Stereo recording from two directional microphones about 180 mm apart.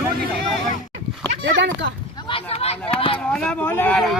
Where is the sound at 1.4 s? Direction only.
85° right.